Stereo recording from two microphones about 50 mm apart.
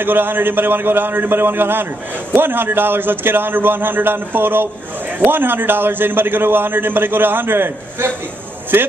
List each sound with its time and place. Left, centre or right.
0.0 s a man's voice: right